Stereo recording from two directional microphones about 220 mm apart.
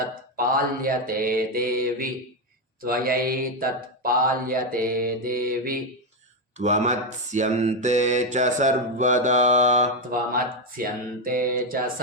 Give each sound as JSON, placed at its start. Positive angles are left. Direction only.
{"t": 0.3, "sound": "mantra", "side_deg": -40}